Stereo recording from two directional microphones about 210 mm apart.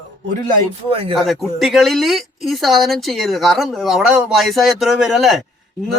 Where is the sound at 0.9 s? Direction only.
25° right (ahead or behind).